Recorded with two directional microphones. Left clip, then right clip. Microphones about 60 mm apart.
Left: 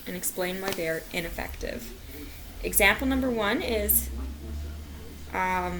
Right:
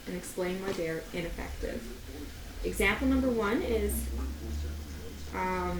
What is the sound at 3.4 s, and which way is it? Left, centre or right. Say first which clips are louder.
Speech: left 3 dB; left.